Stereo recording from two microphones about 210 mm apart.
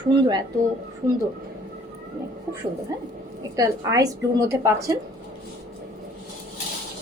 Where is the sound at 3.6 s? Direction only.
15° right (ahead or behind).